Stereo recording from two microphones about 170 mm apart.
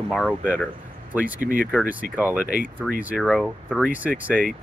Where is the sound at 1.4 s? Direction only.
55° right (ahead or behind).